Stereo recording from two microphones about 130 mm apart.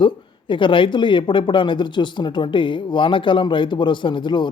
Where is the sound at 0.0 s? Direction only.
40° left (ahead or behind).